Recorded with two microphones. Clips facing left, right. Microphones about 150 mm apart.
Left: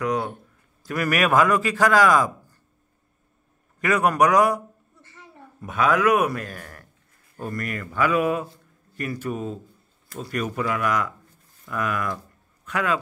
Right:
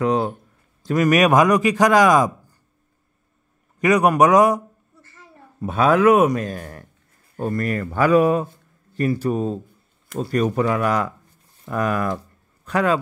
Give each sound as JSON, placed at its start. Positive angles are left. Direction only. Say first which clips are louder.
{"t": 0.0, "sound": "a man's voice", "louder": "right 5 dB", "side_deg": -25}
{"t": 3.8, "sound": "a man's voice", "louder": "right 4 dB", "side_deg": -20}
{"t": 5.6, "sound": "a man's voice", "louder": "right 5 dB", "side_deg": -30}